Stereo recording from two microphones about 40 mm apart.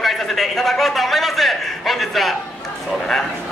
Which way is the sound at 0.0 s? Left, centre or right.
Centre.